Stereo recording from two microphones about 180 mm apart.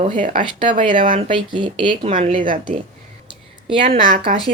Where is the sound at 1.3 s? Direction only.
25° right (ahead or behind).